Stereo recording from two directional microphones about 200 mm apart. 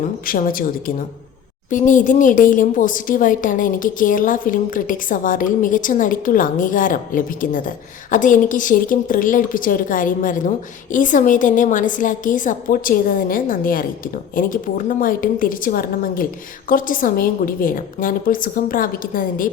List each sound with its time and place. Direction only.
0.0 s a woman's voice: 45° left (ahead or behind)